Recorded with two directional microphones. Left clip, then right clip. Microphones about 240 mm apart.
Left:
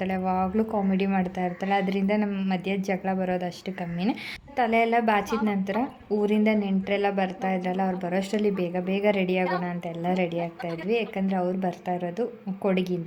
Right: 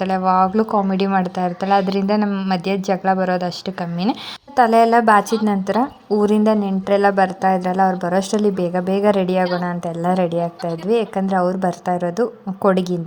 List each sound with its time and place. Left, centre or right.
0.0 s a woman's voice: centre